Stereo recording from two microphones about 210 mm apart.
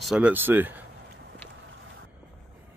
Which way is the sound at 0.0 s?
5° right (ahead or behind).